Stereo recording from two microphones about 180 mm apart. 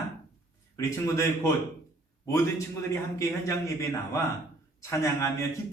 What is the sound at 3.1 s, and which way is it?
A man's voice, 15° left (ahead or behind).